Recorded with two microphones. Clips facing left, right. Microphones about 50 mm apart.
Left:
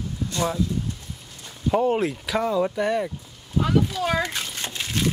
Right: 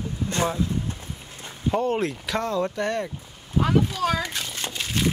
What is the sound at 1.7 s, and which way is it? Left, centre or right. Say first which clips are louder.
Speech: left 2 dB; centre.